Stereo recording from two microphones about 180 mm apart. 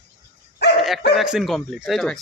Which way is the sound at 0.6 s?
65° left (ahead or behind).